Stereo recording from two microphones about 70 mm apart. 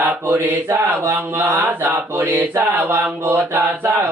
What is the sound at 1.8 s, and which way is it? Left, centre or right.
Mantra, right.